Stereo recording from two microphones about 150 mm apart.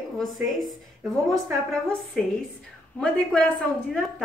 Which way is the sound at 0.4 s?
Centre (ahead or behind).